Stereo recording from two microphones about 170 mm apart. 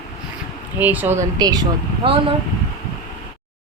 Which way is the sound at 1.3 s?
25° right (ahead or behind).